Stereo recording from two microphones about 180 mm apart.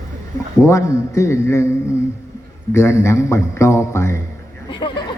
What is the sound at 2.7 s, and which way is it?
A man's voice, 15° left (ahead or behind).